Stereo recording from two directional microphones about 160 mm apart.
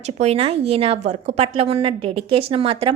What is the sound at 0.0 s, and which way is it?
A woman's voice, 40° right (ahead or behind).